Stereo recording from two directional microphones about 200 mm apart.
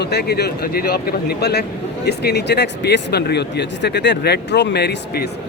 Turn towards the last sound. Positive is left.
turn(degrees=55)  # may be behind; listen again after turning